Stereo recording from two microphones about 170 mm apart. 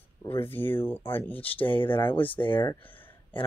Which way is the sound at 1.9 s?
30° left (ahead or behind).